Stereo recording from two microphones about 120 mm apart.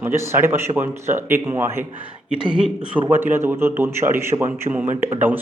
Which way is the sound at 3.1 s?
15° right (ahead or behind).